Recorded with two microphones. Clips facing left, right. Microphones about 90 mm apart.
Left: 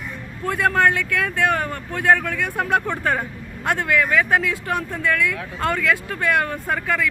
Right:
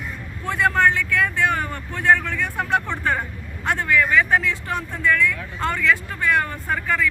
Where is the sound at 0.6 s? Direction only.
55° left (ahead or behind).